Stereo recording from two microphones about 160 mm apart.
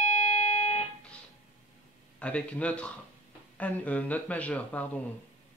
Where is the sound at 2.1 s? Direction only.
5° left (ahead or behind).